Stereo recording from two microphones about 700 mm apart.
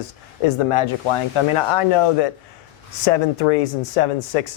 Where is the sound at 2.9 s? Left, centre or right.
Left.